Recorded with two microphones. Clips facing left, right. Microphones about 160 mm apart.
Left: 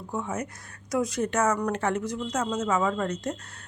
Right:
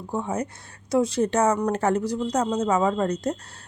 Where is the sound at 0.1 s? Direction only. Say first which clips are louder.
Right 4 dB; 30° right (ahead or behind).